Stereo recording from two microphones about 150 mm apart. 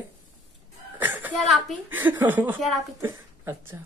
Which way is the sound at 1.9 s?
15° right (ahead or behind).